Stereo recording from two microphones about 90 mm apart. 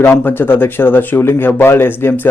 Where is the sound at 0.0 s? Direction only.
25° left (ahead or behind).